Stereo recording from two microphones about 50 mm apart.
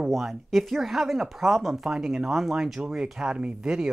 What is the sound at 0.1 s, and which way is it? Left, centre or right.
Speech, centre.